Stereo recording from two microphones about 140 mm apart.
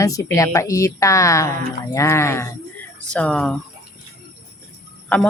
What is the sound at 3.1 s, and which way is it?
Speech, 5° left (ahead or behind).